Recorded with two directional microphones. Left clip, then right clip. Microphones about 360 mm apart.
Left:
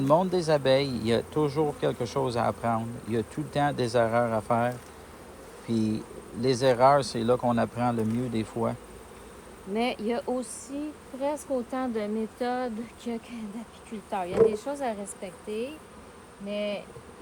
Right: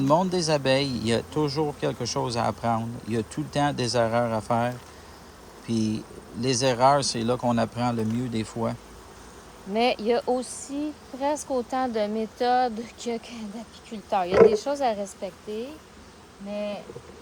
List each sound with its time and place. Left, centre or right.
0.1 s speech: centre
9.7 s speech: right; by 16.8 s centre